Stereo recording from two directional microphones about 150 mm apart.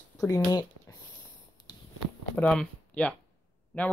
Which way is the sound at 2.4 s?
5° left (ahead or behind).